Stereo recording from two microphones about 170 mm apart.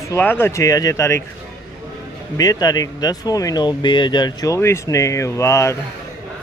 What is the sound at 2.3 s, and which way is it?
Speech, 20° left (ahead or behind).